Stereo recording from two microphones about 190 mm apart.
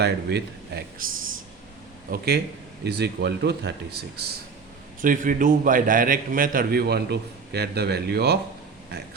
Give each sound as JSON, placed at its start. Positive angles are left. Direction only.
{"t": 0.0, "sound": "speech", "side_deg": -60}
{"t": 2.0, "sound": "speech", "side_deg": -55}
{"t": 4.9, "sound": "a man's voice", "side_deg": -45}